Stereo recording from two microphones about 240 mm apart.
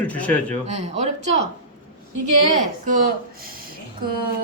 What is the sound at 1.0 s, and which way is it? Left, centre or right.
Speech, right.